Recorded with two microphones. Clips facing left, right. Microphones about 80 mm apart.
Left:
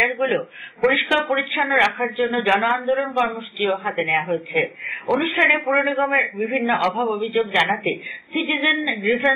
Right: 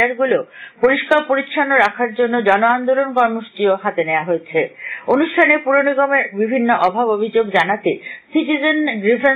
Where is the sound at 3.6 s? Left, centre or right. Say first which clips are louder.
Right 6 dB; right.